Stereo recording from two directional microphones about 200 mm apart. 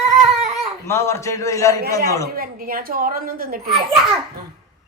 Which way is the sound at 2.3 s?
45° right (ahead or behind).